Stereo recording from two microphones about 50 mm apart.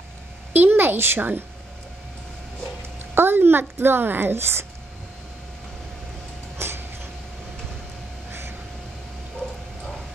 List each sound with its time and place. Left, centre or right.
0.5 s a woman's voice: right
3.2 s speech: right
6.6 s a sound: right
8.3 s vehicle: right